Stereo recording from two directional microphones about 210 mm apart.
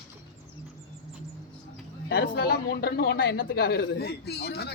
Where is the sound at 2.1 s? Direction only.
45° left (ahead or behind).